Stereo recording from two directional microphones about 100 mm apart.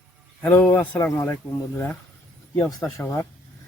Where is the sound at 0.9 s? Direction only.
30° left (ahead or behind).